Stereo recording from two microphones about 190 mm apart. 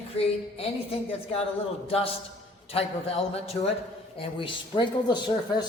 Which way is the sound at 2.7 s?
30° left (ahead or behind).